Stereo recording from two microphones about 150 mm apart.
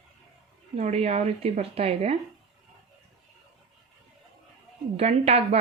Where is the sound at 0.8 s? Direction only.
50° right (ahead or behind).